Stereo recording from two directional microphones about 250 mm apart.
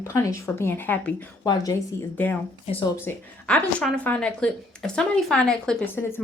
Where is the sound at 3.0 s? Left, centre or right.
Centre.